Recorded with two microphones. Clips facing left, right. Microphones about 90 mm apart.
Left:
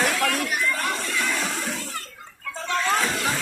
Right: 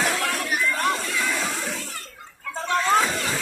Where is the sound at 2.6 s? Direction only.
20° right (ahead or behind).